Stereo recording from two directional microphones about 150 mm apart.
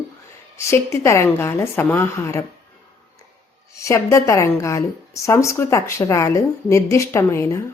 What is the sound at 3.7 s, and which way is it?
A woman's voice, 20° left (ahead or behind).